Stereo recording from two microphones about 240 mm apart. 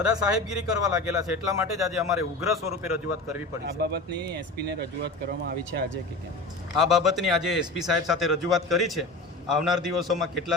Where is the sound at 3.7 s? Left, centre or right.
Right.